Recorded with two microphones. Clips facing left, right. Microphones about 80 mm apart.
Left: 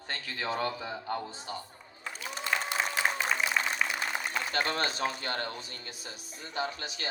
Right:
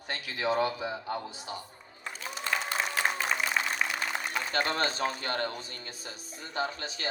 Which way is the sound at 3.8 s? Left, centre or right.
Centre.